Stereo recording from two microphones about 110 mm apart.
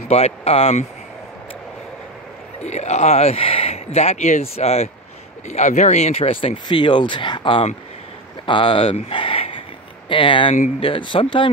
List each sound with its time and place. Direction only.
0.1 s speech: 65° left (ahead or behind)
2.6 s speech: 90° left; by 4.8 s 70° left (ahead or behind)
5.5 s speech: 90° left; by 11.5 s 50° left (ahead or behind)